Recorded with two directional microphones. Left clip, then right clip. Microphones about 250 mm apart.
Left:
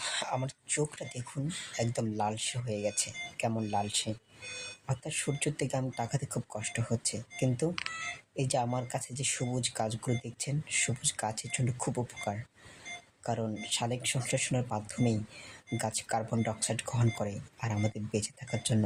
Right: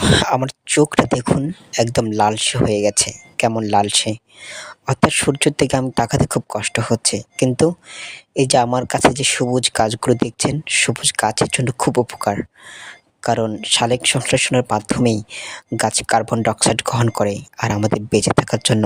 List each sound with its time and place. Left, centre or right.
0.0 s speech: right